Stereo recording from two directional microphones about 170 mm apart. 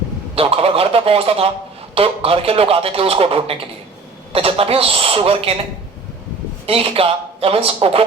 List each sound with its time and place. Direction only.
0.3 s speech: 35° right (ahead or behind)
6.7 s speech: 35° right (ahead or behind)